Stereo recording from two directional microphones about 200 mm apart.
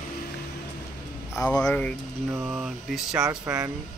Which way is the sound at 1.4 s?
5° left (ahead or behind).